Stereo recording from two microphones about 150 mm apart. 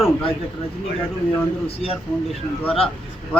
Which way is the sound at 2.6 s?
40° left (ahead or behind).